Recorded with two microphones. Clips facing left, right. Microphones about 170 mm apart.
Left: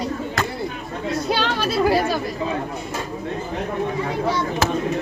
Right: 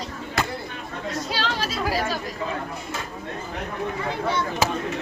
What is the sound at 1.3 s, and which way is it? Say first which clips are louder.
Speech: left 7 dB; 60° left (ahead or behind).